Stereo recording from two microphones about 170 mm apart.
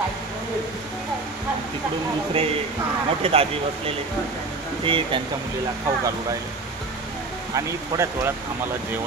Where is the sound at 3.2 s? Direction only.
35° right (ahead or behind).